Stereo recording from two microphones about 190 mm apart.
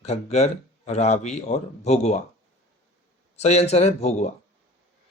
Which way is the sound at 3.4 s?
35° left (ahead or behind).